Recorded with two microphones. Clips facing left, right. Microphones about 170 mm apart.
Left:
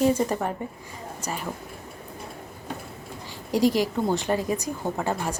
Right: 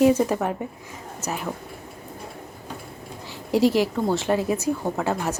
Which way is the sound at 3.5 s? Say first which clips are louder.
Right 2 dB; 40° left (ahead or behind).